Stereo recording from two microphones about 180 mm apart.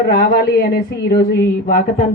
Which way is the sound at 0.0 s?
60° left (ahead or behind).